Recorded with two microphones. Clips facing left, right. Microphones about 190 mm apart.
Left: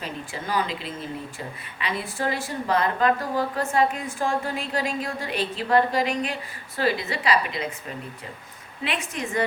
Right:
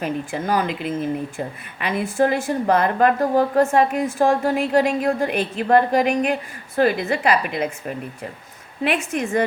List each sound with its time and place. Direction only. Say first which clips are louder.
0.0 s speech: right 9 dB; 50° right (ahead or behind)